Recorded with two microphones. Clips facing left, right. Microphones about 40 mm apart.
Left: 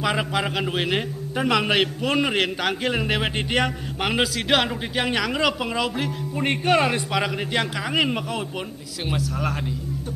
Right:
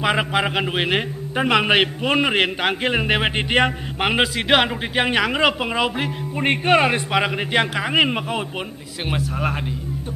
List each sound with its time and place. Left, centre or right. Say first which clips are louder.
0.0 s a man's voice: right 4 dB; right